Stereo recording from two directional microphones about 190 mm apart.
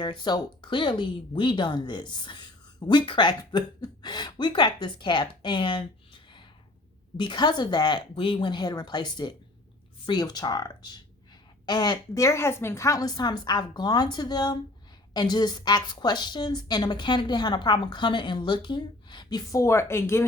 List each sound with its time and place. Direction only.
0.0 s speech: 25° left (ahead or behind)
7.2 s speech: 25° left (ahead or behind)